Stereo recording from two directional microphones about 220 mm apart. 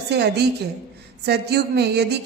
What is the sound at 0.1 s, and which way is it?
A woman's voice, 50° right (ahead or behind).